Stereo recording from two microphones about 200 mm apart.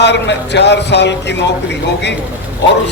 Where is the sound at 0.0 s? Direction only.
60° left (ahead or behind).